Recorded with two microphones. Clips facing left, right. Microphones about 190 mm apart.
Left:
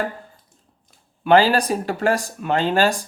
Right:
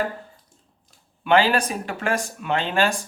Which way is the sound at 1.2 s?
40° left (ahead or behind).